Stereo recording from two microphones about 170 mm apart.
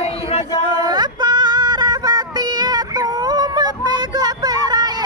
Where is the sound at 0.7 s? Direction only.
25° right (ahead or behind).